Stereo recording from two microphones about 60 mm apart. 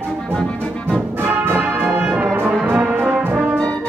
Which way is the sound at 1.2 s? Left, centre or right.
Right.